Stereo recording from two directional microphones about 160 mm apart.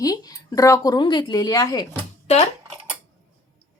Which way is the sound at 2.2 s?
40° left (ahead or behind).